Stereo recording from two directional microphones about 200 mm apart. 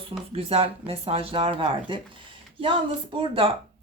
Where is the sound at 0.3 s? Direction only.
30° right (ahead or behind).